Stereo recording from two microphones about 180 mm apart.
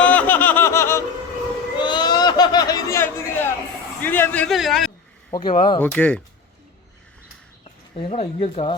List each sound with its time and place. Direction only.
0.0 s snicker: 10° left (ahead or behind)
1.8 s a sound: 25° left (ahead or behind)
4.0 s a man's voice: 10° left (ahead or behind)
5.3 s speech: 25° left (ahead or behind)
5.8 s speech: 10° left (ahead or behind)
7.9 s speech: 30° left (ahead or behind)